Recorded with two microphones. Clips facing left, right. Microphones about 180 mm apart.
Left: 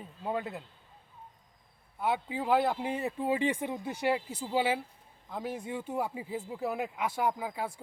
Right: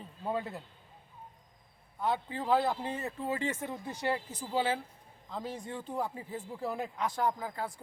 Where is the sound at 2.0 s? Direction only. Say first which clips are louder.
Left 1 dB; 10° left (ahead or behind).